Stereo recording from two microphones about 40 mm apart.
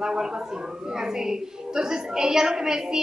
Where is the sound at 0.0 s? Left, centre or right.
Centre.